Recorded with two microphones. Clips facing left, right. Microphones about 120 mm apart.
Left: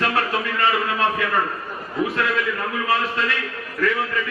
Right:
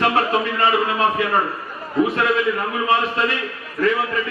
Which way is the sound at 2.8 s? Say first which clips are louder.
Right 3 dB; 20° right (ahead or behind).